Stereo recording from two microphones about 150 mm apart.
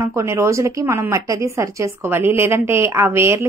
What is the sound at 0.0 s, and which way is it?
A woman's voice, 20° right (ahead or behind).